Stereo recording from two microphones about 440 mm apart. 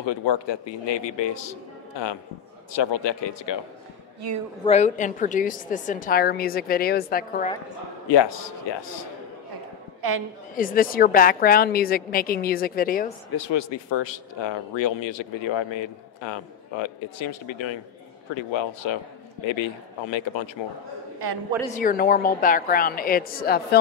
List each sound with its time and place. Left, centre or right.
0.0 s a man's voice: left
4.6 s a woman's voice: centre
8.1 s a man's voice: left
10.5 s a woman's voice: centre
13.4 s speech: left
21.7 s a woman's voice: centre